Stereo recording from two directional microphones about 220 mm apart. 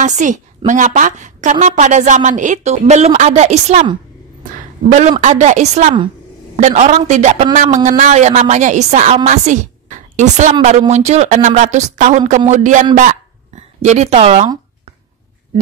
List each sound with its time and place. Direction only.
0.0 s a woman's voice: 35° right (ahead or behind)
5.2 s a woman's voice: 30° right (ahead or behind)